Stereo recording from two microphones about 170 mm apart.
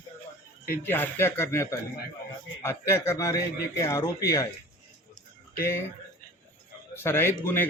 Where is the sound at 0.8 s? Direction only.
10° left (ahead or behind).